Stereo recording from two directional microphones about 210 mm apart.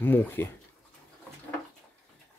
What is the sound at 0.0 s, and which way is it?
Speech, 10° left (ahead or behind).